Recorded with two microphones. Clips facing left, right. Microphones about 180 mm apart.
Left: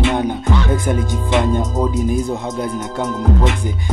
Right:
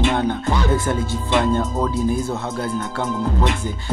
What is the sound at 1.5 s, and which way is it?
Speech, 15° left (ahead or behind).